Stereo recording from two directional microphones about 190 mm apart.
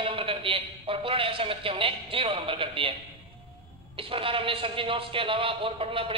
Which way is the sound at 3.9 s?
30° right (ahead or behind).